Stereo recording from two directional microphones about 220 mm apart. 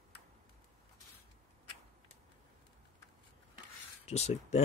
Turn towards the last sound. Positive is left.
turn(degrees=30)  # may be behind; listen again after turning